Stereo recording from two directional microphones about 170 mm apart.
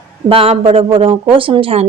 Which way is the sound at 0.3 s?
35° right (ahead or behind).